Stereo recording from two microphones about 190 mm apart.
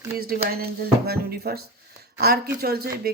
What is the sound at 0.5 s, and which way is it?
Music, 55° right (ahead or behind).